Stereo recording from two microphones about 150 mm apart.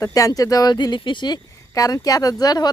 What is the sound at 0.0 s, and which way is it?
Speech, 25° left (ahead or behind).